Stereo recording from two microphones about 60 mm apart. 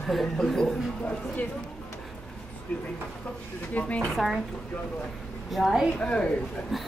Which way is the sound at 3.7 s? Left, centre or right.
Left.